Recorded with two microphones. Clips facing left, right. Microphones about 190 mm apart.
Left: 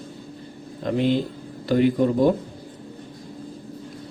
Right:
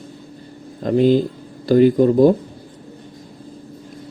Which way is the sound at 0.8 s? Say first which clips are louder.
Right 7 dB; 40° right (ahead or behind).